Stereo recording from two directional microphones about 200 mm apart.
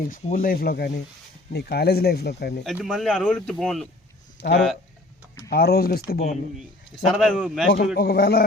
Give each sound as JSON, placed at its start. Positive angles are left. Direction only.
{"t": 0.1, "sound": "speech", "side_deg": 45}
{"t": 2.6, "sound": "speech", "side_deg": 0}
{"t": 4.4, "sound": "speech", "side_deg": 55}
{"t": 6.9, "sound": "speech", "side_deg": 0}
{"t": 7.9, "sound": "speech", "side_deg": 50}